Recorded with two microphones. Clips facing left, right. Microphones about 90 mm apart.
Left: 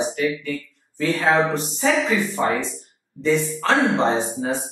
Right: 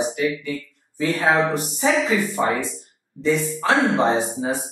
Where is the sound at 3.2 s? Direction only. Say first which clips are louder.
Left 1 dB; 5° right (ahead or behind).